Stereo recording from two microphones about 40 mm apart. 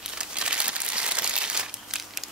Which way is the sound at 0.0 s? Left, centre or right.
Right.